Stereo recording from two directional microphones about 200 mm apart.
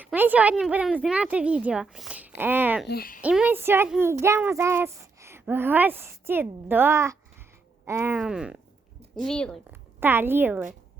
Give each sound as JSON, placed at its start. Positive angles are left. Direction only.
{"t": 0.0, "sound": "a woman's voice", "side_deg": -10}
{"t": 2.8, "sound": "speech", "side_deg": 50}
{"t": 3.2, "sound": "a woman's voice", "side_deg": -5}
{"t": 10.0, "sound": "a woman's voice", "side_deg": -10}